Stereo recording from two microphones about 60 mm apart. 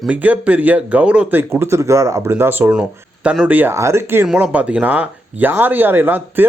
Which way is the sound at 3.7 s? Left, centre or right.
Right.